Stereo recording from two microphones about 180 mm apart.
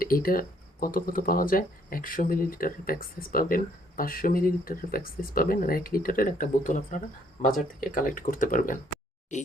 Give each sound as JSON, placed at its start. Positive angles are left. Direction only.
{"t": 0.0, "sound": "speech", "side_deg": 55}